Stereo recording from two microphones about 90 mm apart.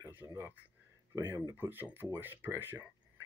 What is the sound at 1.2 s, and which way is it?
Speech, 30° right (ahead or behind).